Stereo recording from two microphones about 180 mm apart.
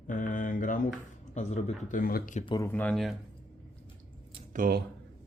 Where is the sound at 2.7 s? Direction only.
5° left (ahead or behind).